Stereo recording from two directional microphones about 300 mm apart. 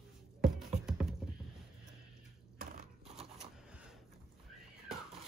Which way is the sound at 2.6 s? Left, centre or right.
Right.